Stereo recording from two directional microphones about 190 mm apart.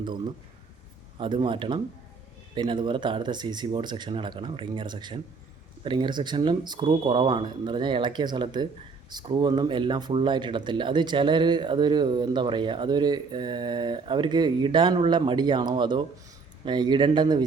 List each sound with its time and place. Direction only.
1.2 s speech: 25° right (ahead or behind)